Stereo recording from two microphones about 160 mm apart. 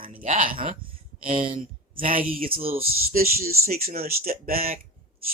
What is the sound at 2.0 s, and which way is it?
Speech, 60° right (ahead or behind).